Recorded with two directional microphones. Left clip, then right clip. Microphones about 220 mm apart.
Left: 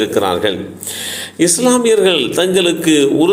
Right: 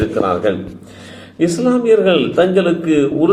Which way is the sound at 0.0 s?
40° left (ahead or behind).